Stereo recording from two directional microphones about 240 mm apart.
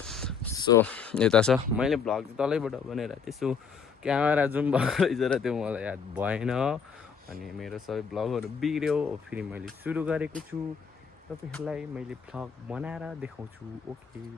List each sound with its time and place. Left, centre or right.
0.0 s a sound: centre
0.5 s speech: centre
11.5 s speech: centre